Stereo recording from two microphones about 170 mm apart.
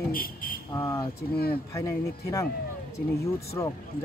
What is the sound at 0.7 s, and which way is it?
Speech, 15° left (ahead or behind).